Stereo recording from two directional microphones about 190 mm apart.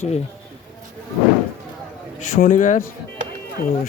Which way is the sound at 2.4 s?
45° left (ahead or behind).